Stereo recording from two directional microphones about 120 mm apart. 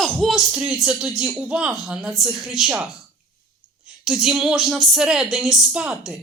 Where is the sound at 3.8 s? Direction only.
5° right (ahead or behind).